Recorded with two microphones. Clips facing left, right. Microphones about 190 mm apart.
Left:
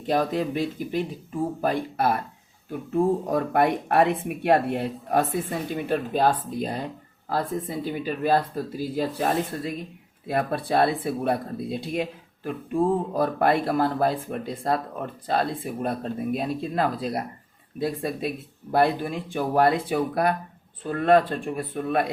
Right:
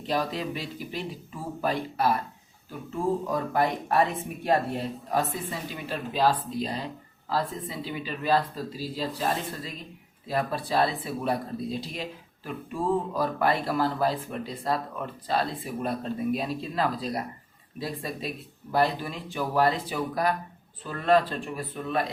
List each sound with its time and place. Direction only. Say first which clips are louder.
0.1 s speech: left 5 dB; 50° left (ahead or behind)
13.1 s speech: left 4 dB; 55° left (ahead or behind)